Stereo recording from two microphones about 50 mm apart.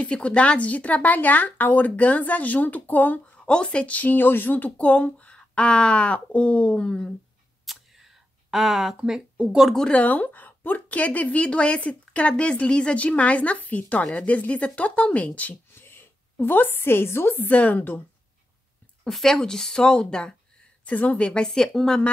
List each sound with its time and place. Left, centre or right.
0.0 s speech: left
3.4 s speech: left
7.6 s a sound: centre
9.8 s speech: left
15.7 s a woman's voice: left
17.5 s speech: left
19.0 s speech: centre
20.8 s speech: left
21.3 s speech: centre